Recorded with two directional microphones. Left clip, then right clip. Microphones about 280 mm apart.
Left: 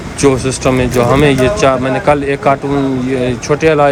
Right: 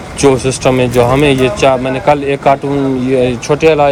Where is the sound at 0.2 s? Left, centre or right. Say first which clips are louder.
Right 2 dB; centre.